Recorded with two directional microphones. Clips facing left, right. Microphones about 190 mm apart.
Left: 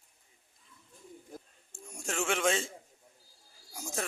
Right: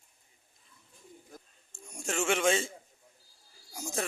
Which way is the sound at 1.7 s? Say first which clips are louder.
Right 2 dB; centre (ahead or behind).